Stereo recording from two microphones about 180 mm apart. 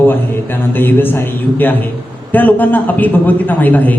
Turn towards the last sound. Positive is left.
turn(degrees=10)  # may be behind; listen again after turning